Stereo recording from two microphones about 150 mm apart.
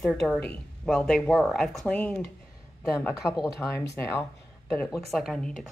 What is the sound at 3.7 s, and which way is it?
Speech, 15° left (ahead or behind).